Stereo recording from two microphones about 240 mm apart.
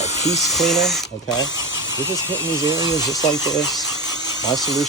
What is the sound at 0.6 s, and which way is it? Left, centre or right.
Speech, centre.